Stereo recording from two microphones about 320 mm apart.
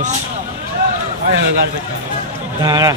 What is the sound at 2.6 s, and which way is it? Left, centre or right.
Speech, centre.